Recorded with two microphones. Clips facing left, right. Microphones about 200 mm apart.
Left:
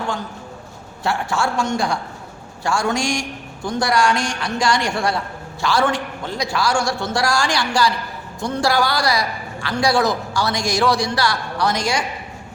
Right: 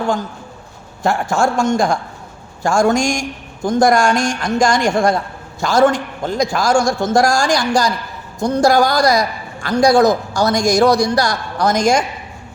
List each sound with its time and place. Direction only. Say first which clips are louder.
1.0 s a man's voice: right 5 dB; 45° right (ahead or behind)